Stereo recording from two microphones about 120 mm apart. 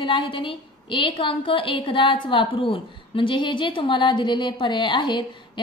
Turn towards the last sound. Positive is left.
turn(degrees=45)  # may be behind; listen again after turning